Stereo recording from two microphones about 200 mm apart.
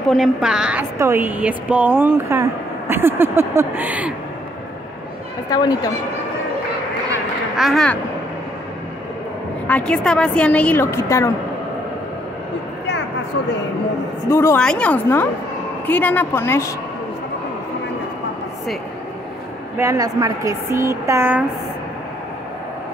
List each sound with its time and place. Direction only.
0.1 s a woman's voice: centre (ahead or behind)
5.5 s speech: 20° left (ahead or behind)
7.5 s speech: centre (ahead or behind)
9.7 s a woman's voice: 5° left (ahead or behind)
14.3 s a woman's voice: 10° left (ahead or behind)
19.8 s a woman's voice: 15° right (ahead or behind)